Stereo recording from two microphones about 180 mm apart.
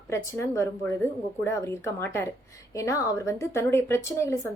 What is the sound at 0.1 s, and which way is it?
A woman's voice, 15° left (ahead or behind).